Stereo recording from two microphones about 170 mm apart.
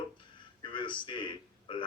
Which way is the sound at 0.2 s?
30° left (ahead or behind).